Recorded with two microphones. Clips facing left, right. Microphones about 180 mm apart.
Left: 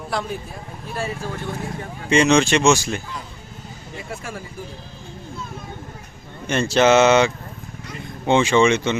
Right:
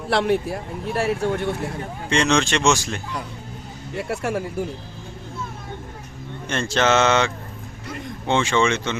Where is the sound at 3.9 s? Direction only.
70° right (ahead or behind).